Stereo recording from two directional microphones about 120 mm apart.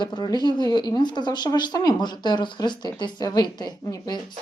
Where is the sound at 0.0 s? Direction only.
35° left (ahead or behind).